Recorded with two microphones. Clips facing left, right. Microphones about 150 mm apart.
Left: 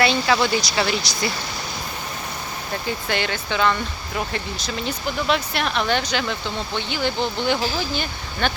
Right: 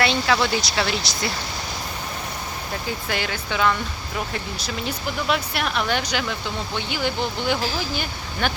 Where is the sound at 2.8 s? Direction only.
5° right (ahead or behind).